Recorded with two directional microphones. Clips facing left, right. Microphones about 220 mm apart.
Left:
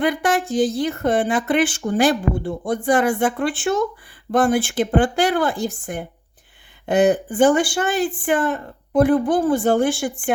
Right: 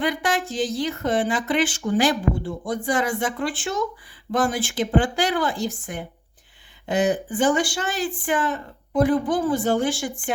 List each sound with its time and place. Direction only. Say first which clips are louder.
0.0 s speech: left 4 dB; 55° left (ahead or behind)